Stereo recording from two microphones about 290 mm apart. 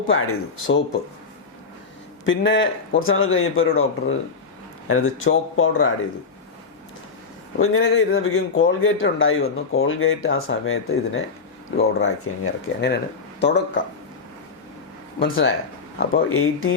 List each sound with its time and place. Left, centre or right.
0.1 s speech: left
2.2 s speech: left
7.6 s speech: left
15.2 s speech: left